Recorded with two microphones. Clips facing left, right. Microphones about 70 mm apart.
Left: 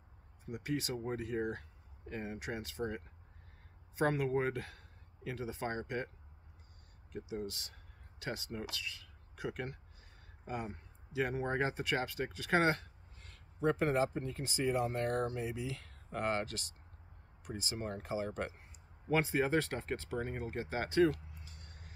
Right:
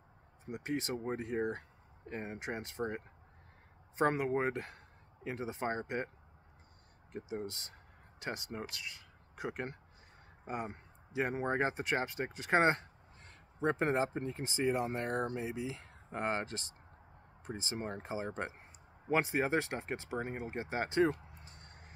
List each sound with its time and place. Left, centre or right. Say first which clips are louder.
0.5 s speech: right 1 dB; right
7.1 s speech: right 1 dB; right